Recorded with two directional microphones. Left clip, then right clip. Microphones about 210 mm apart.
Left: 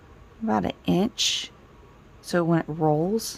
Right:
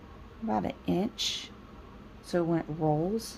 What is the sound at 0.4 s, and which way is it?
Speech, 35° left (ahead or behind).